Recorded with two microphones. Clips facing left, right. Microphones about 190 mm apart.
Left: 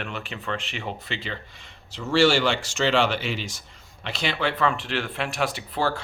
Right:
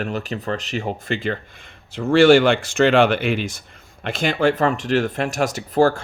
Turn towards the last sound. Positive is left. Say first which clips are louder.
# right 9 dB
turn(degrees=-45)  # may be behind; listen again after turning